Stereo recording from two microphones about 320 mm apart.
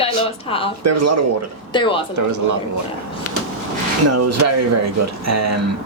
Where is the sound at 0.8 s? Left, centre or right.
Right.